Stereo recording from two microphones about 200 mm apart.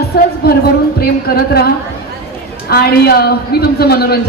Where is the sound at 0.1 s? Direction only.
50° left (ahead or behind).